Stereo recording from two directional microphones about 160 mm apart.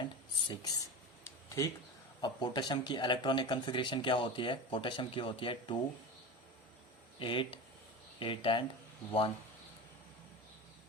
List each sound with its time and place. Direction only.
0.0 s a sound: 30° left (ahead or behind)
2.2 s speech: 25° left (ahead or behind)
7.2 s speech: 30° left (ahead or behind)